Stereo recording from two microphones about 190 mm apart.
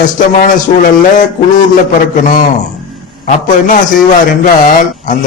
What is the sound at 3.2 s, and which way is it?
Speech, 40° left (ahead or behind).